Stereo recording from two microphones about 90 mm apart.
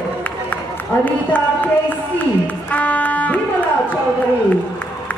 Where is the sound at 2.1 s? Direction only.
20° left (ahead or behind).